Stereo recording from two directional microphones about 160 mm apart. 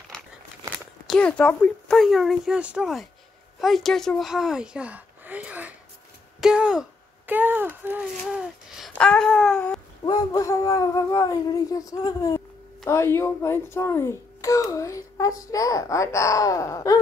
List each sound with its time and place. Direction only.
1.0 s speech: 5° left (ahead or behind)
10.0 s a child's voice: 25° left (ahead or behind)